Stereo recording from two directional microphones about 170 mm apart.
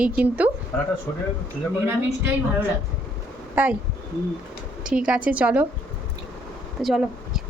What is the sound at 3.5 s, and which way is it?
Speech, 10° right (ahead or behind).